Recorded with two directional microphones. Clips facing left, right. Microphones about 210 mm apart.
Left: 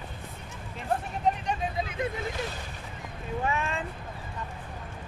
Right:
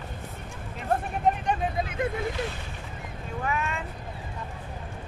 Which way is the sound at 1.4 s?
55° right (ahead or behind).